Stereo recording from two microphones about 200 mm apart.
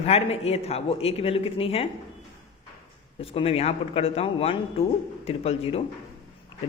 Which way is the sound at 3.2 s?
30° left (ahead or behind).